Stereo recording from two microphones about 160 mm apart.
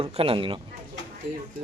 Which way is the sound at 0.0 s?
35° right (ahead or behind).